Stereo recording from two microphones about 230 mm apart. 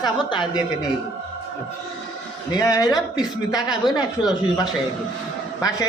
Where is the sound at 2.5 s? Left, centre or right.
Centre.